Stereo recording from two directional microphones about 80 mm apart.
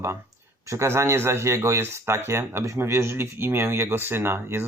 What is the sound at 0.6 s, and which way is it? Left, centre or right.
Speech, right.